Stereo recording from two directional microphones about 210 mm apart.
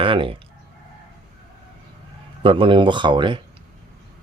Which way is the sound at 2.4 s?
25° right (ahead or behind).